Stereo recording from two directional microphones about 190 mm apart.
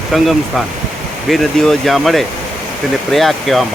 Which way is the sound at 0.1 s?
Centre (ahead or behind).